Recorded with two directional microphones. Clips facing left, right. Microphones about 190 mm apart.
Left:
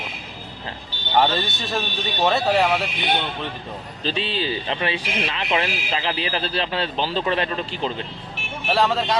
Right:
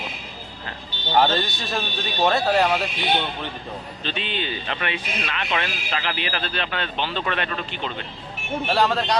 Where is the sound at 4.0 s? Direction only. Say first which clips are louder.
Left 5 dB; 35° left (ahead or behind).